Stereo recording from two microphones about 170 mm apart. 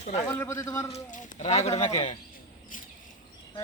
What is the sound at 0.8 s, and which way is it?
Speech, 40° left (ahead or behind).